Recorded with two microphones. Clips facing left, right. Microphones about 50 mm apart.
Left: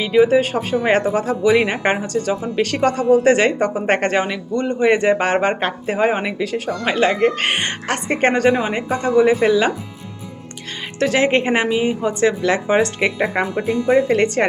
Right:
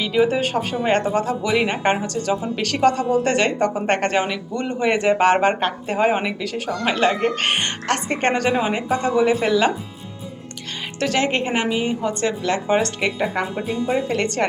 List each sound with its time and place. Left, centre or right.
0.0 s speech: centre
4.5 s speech: centre
11.0 s speech: centre
13.1 s speech: left
13.6 s speech: left
14.1 s speech: centre